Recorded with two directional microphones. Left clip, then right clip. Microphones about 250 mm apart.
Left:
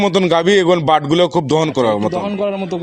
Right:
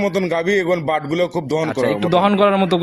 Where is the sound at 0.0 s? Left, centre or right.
Left.